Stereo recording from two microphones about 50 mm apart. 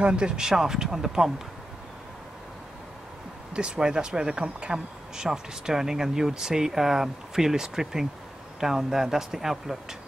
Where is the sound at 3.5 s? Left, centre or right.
Centre.